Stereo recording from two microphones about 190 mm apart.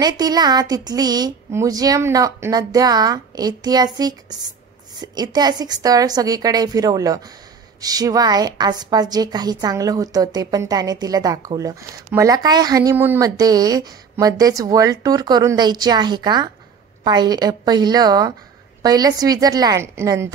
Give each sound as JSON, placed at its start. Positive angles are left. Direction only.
{"t": 0.0, "sound": "a woman's voice", "side_deg": -20}